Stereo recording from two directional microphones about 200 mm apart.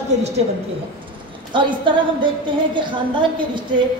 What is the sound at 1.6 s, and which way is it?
A woman's voice, 25° right (ahead or behind).